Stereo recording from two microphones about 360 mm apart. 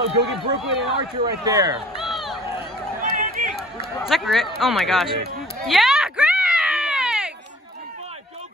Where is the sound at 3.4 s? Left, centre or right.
Right.